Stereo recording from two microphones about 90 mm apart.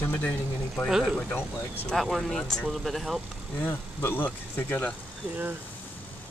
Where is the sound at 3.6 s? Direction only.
25° left (ahead or behind).